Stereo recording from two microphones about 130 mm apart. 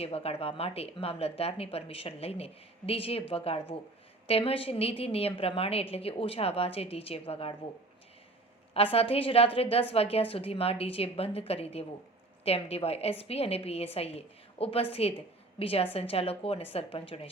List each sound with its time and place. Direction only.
0.0 s speech: 50° left (ahead or behind)
8.7 s speech: 45° left (ahead or behind)